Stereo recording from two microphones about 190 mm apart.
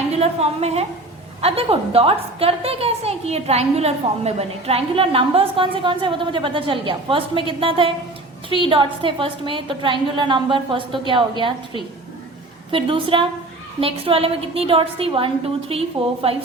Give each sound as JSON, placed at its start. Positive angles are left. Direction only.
{"t": 0.1, "sound": "a woman's voice", "side_deg": -35}